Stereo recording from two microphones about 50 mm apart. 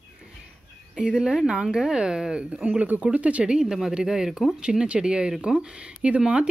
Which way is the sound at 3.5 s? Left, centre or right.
Centre.